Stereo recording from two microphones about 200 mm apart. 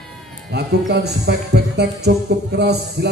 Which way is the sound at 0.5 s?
55° right (ahead or behind).